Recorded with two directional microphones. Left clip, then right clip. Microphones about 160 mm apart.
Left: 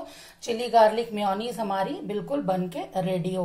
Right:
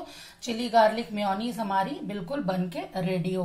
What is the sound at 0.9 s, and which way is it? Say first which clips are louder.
Speech: left 3 dB; 45° right (ahead or behind).